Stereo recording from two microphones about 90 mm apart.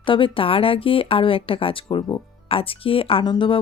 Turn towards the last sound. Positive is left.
turn(degrees=65)  # may be behind; listen again after turning